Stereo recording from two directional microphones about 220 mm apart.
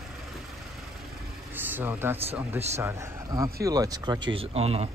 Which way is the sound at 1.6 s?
10° right (ahead or behind).